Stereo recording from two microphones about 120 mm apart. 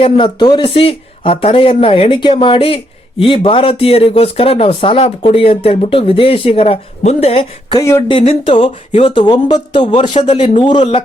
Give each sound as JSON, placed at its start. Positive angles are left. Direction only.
{"t": 0.0, "sound": "speech", "side_deg": 40}
{"t": 0.6, "sound": "speech", "side_deg": 50}
{"t": 7.7, "sound": "speech", "side_deg": 25}
{"t": 8.5, "sound": "speech", "side_deg": 50}
{"t": 10.2, "sound": "a man's voice", "side_deg": 60}
{"t": 10.5, "sound": "speech", "side_deg": 45}